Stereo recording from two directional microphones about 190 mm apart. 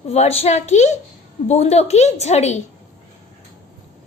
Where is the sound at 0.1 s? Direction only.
35° left (ahead or behind).